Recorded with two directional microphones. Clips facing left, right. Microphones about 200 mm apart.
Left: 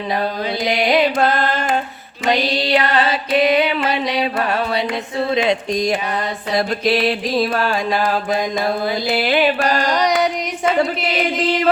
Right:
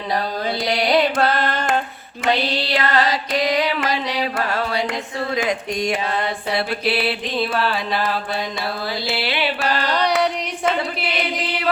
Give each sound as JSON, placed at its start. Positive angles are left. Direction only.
{"t": 0.7, "sound": "carnatic music", "side_deg": 20}
{"t": 1.2, "sound": "carnatic music", "side_deg": 50}
{"t": 2.3, "sound": "music", "side_deg": 15}
{"t": 3.1, "sound": "mantra", "side_deg": 25}
{"t": 5.3, "sound": "speech", "side_deg": 25}
{"t": 6.6, "sound": "mantra", "side_deg": 40}
{"t": 8.8, "sound": "mantra", "side_deg": 20}
{"t": 9.1, "sound": "mantra", "side_deg": 45}
{"t": 9.8, "sound": "carnatic music", "side_deg": 10}